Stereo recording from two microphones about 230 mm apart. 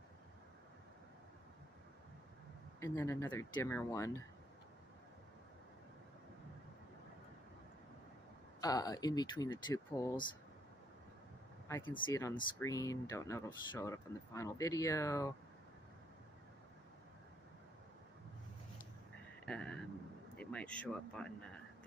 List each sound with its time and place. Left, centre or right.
2.8 s speech: centre
8.5 s speech: centre
11.9 s speech: centre
19.4 s vehicle: centre
20.3 s speech: centre